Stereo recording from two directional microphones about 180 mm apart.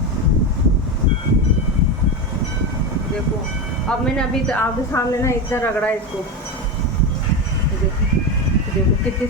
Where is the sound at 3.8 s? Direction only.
5° left (ahead or behind).